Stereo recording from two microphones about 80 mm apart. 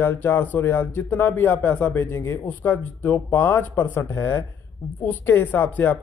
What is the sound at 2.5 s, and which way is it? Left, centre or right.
Speech, left.